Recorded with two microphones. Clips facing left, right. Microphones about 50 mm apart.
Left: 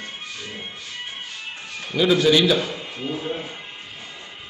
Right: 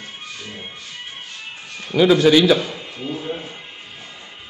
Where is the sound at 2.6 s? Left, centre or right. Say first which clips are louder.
Even; centre.